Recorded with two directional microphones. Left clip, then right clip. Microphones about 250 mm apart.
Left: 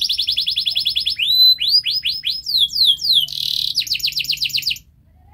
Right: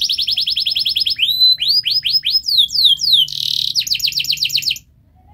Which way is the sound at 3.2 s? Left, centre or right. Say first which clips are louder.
Right 3 dB; centre.